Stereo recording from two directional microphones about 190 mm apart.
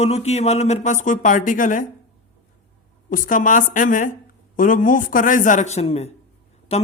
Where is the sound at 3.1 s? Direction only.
45° left (ahead or behind).